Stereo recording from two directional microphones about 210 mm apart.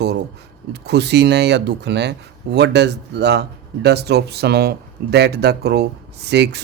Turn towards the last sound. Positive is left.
turn(degrees=-55)  # may be behind; listen again after turning